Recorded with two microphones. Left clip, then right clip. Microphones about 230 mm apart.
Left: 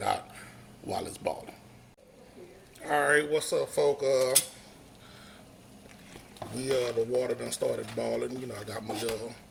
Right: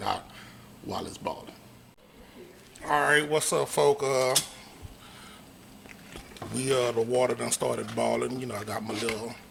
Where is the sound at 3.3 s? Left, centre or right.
Right.